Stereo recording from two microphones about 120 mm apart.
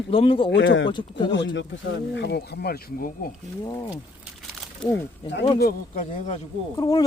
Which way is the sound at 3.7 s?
35° left (ahead or behind).